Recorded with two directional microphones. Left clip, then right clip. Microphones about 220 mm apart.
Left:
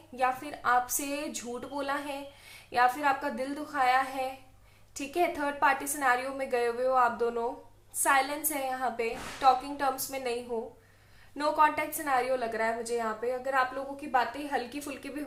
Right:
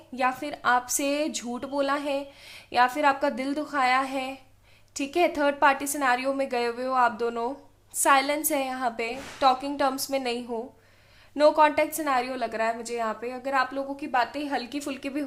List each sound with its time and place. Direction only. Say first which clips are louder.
0.2 s a woman's voice: right 3 dB; 50° right (ahead or behind)